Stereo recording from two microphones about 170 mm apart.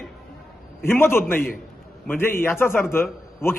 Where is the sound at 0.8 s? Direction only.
10° left (ahead or behind).